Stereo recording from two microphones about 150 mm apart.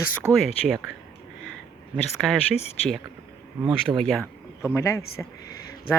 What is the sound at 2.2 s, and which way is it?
Speech, 5° left (ahead or behind).